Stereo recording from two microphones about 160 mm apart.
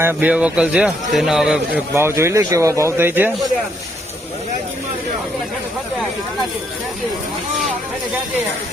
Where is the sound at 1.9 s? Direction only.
15° right (ahead or behind).